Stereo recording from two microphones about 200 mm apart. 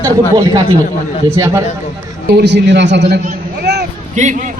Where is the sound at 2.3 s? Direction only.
60° right (ahead or behind).